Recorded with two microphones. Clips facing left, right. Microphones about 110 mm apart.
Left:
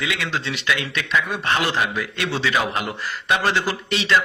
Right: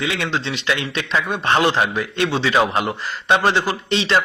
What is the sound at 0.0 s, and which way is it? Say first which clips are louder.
A man's voice: right 3 dB; 30° right (ahead or behind).